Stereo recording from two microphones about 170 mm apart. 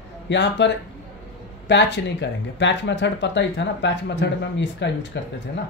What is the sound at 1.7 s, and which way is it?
Speech, 90° left.